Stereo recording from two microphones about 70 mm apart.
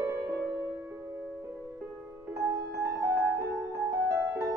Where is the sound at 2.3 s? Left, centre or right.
Right.